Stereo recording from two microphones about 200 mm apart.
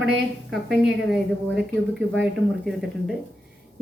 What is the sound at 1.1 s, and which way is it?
Speech, centre (ahead or behind).